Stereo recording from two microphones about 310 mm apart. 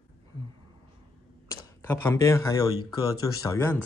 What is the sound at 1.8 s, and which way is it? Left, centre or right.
Speech, centre.